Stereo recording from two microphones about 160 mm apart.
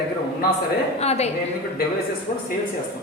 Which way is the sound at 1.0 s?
40° left (ahead or behind).